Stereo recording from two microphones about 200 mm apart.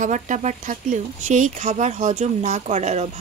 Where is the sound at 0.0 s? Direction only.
40° right (ahead or behind).